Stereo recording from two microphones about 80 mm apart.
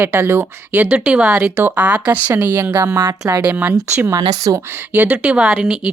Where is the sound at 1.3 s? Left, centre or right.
Right.